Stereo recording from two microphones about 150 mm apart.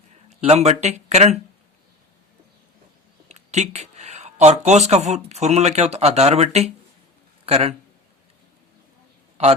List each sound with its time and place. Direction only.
0.3 s speech: 45° right (ahead or behind)
3.2 s speech: 50° right (ahead or behind)
9.4 s a man's voice: 45° right (ahead or behind)